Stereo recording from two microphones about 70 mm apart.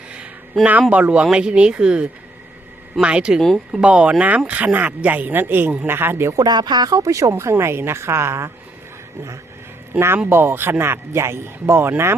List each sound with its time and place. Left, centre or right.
0.6 s speech: centre
3.4 s speech: centre
3.8 s speech: centre; by 6.3 s right
6.3 s speech: right
10.2 s speech: right